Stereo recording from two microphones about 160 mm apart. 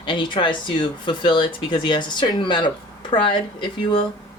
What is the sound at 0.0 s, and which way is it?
Speech, 30° left (ahead or behind).